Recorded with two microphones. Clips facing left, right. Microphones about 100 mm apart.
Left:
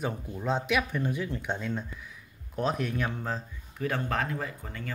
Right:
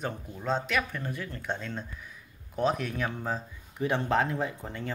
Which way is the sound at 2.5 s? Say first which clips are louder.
Right 1 dB; centre (ahead or behind).